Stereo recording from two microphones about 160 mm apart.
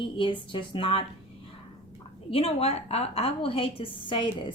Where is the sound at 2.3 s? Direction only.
35° left (ahead or behind).